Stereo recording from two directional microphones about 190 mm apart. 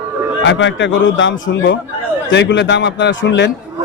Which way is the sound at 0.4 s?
75° left (ahead or behind).